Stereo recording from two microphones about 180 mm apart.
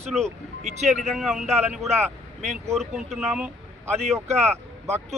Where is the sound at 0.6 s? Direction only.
40° right (ahead or behind).